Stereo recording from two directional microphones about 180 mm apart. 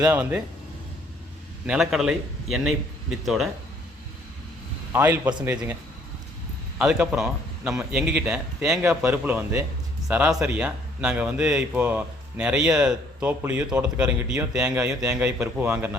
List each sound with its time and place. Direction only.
0.0 s a man's voice: 10° right (ahead or behind)
1.6 s speech: 5° right (ahead or behind)
4.9 s a man's voice: 10° right (ahead or behind)
6.7 s a man's voice: 5° right (ahead or behind)